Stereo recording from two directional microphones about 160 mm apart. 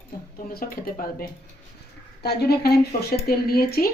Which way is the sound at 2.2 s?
90° left.